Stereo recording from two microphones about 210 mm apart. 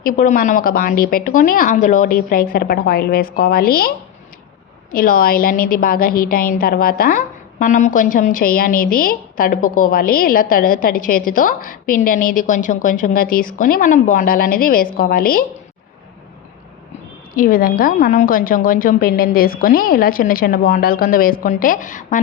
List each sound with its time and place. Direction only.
0.0 s a woman's voice: 40° left (ahead or behind)
17.3 s a woman's voice: 40° left (ahead or behind)